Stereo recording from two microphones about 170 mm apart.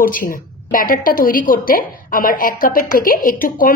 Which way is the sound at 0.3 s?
55° left (ahead or behind).